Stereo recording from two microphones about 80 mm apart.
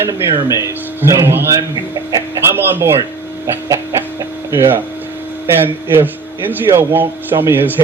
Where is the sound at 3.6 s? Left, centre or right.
Right.